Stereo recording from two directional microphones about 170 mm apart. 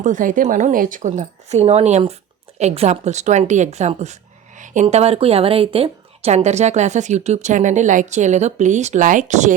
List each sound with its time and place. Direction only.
0.0 s a woman's voice: 50° right (ahead or behind)